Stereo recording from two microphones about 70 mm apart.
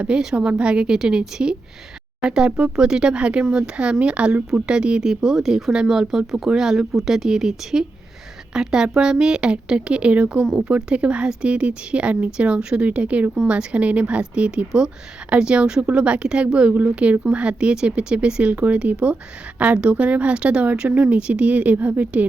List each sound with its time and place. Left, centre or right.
0.0 s speech: centre